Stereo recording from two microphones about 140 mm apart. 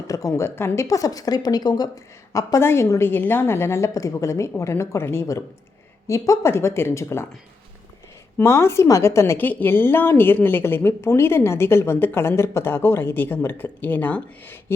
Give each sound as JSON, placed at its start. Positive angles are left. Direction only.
{"t": 0.1, "sound": "a woman's voice", "side_deg": 25}
{"t": 8.4, "sound": "a woman's voice", "side_deg": 20}